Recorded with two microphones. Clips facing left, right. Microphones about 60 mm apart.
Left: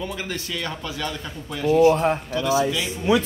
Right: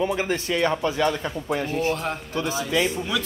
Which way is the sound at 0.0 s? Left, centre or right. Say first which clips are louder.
Right 6 dB; right.